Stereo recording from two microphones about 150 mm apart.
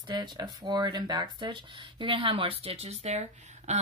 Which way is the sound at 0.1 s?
30° right (ahead or behind).